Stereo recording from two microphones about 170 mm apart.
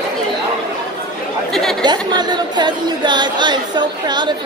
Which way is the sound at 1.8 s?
25° right (ahead or behind).